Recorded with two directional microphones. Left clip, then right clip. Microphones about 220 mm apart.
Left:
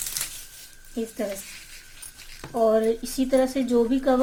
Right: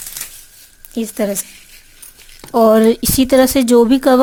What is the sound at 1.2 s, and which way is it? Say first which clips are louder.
Speech: right 12 dB; 45° right (ahead or behind).